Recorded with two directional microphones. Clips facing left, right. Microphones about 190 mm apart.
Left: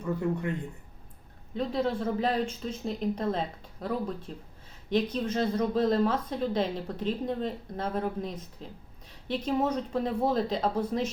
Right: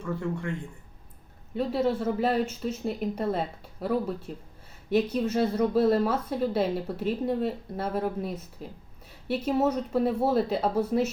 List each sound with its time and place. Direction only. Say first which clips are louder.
0.0 s speech: left 2 dB; 20° left (ahead or behind)
1.5 s speech: right 3 dB; 5° right (ahead or behind)